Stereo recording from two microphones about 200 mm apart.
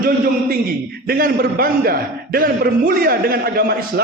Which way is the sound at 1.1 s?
45° right (ahead or behind).